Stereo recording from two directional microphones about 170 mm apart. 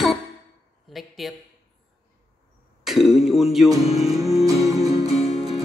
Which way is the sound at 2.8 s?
Centre (ahead or behind).